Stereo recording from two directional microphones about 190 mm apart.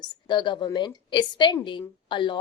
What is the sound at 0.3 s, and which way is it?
A woman's voice, 25° left (ahead or behind).